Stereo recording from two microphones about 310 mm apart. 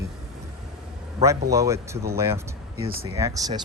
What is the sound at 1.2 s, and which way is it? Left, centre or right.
A man's voice, centre.